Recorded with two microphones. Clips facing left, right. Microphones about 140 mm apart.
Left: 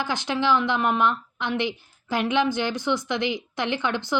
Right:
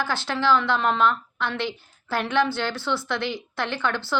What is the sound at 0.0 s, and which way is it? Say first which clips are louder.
A woman's voice: even; 15° left (ahead or behind).